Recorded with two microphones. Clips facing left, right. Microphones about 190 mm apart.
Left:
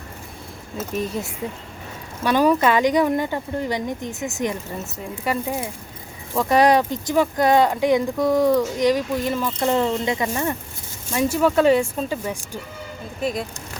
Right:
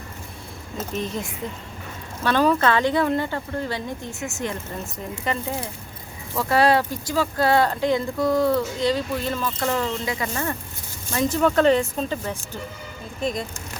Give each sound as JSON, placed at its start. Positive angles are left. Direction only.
{"t": 0.8, "sound": "speech", "side_deg": 10}